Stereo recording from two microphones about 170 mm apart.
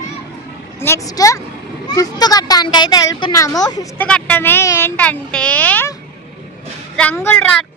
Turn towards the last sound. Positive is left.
turn(degrees=10)  # may be behind; listen again after turning